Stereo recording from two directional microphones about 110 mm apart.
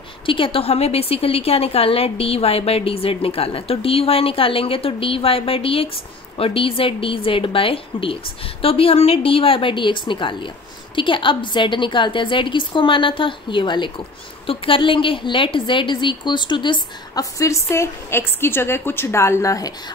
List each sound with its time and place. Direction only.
0.3 s a woman's voice: 55° left (ahead or behind); by 19.7 s 30° left (ahead or behind)